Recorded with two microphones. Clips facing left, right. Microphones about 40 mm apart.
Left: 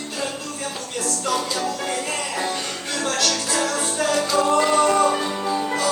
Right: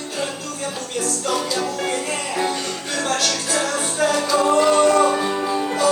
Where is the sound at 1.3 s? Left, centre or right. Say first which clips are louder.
Right 1 dB; centre.